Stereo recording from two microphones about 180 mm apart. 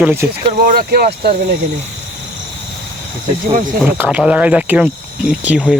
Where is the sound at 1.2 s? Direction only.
55° right (ahead or behind).